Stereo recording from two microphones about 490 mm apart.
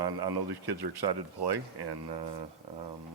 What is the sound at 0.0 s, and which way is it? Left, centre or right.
Speech, right.